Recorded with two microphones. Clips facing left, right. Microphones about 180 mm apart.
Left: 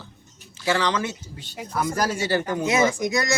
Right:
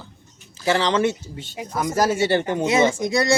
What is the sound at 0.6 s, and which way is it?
Speech, 30° right (ahead or behind).